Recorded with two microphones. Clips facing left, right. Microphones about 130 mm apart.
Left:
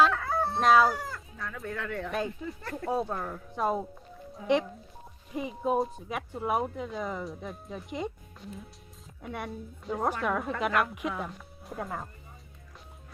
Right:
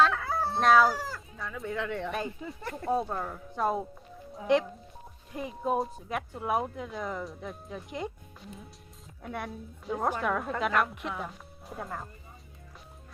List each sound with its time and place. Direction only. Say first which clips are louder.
0.0 s chicken: left 1 dB; centre (ahead or behind)
1.6 s speech: right 3 dB; 20° right (ahead or behind)
2.9 s speech: right 1 dB; 5° right (ahead or behind)
5.3 s speech: left 2 dB; centre (ahead or behind)